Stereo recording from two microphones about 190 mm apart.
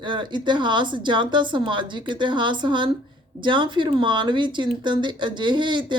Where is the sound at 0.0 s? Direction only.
25° right (ahead or behind).